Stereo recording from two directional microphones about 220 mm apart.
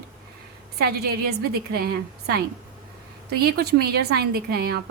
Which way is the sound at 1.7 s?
45° right (ahead or behind).